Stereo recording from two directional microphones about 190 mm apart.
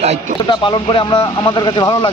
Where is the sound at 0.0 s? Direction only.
35° right (ahead or behind).